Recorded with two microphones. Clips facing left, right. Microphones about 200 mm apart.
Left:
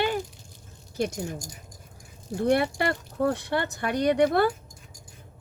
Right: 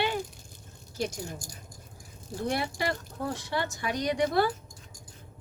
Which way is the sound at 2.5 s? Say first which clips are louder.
Left 7 dB; 60° left (ahead or behind).